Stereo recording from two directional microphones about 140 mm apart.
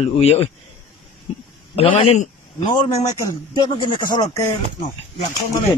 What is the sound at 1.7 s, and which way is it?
Speech, 45° left (ahead or behind).